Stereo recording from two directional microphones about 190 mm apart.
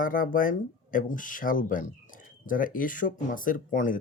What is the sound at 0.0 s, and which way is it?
Speech, 45° left (ahead or behind).